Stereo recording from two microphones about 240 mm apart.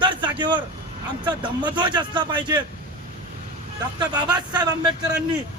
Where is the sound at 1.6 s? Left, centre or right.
Centre.